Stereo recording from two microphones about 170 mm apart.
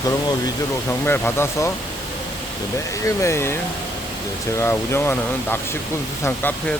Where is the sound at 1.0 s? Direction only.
15° left (ahead or behind).